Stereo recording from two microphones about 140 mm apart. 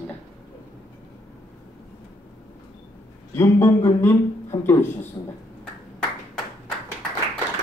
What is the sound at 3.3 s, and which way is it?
Speech, 20° left (ahead or behind).